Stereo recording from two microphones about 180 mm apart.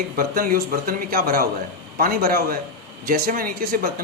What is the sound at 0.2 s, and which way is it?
A man's voice, 50° right (ahead or behind).